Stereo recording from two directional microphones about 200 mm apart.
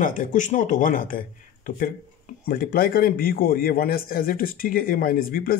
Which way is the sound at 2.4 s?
45° left (ahead or behind).